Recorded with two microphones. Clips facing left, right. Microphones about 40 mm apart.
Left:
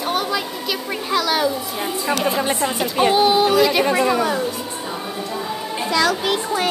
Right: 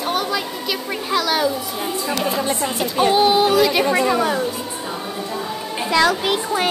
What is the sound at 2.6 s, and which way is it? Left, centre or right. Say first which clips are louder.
A woman's voice: even; centre.